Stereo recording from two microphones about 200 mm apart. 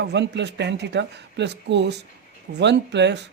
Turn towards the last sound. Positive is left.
turn(degrees=-60)  # may be behind; listen again after turning